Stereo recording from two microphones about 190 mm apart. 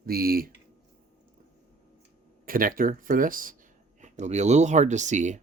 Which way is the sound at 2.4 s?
45° right (ahead or behind).